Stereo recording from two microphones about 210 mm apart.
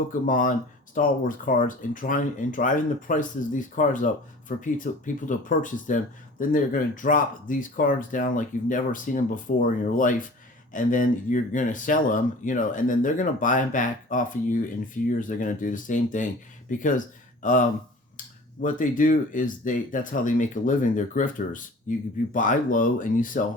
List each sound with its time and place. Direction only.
0.1 s speech: 40° left (ahead or behind)